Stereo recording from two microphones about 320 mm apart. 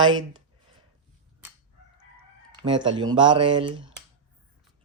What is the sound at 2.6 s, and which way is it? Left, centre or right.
Speech, centre.